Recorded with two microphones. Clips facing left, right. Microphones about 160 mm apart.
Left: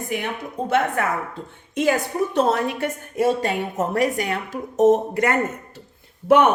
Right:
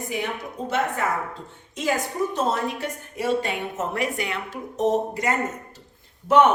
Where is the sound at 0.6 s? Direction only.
55° left (ahead or behind).